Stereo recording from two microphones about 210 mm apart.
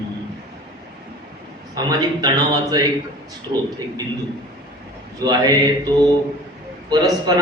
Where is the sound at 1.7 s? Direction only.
20° right (ahead or behind).